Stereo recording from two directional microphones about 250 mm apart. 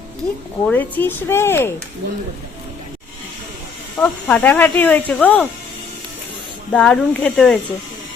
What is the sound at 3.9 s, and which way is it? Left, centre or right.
Speech, centre.